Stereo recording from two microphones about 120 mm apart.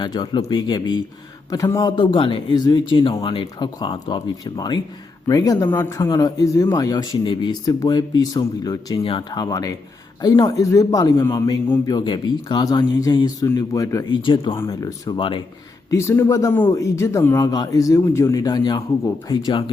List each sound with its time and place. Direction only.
0.0 s a man's voice: 40° left (ahead or behind)
5.6 s a man's voice: 20° left (ahead or behind)
14.2 s speech: 45° left (ahead or behind)
14.8 s speech: 30° left (ahead or behind)